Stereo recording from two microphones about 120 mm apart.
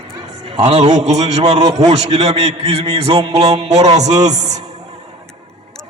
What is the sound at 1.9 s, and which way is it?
A man's voice, 60° right (ahead or behind).